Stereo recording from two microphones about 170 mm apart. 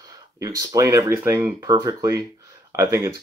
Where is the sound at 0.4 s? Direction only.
20° right (ahead or behind).